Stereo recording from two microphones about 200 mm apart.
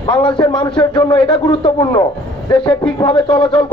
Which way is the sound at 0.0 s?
25° left (ahead or behind).